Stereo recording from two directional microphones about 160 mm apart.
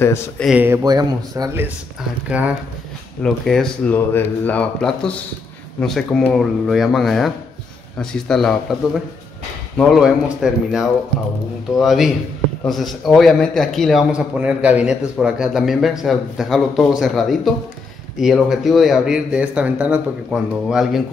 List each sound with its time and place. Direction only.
0.4 s a man's voice: 5° left (ahead or behind)
0.8 s speech: 25° right (ahead or behind)
3.2 s a man's voice: 5° left (ahead or behind)
9.8 s a man's voice: centre (ahead or behind)